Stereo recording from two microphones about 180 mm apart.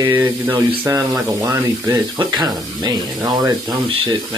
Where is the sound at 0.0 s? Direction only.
10° right (ahead or behind).